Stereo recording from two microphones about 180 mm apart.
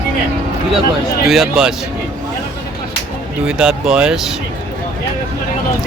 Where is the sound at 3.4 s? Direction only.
5° right (ahead or behind).